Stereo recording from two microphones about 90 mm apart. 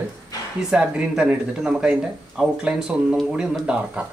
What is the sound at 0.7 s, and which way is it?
Speech, 10° right (ahead or behind).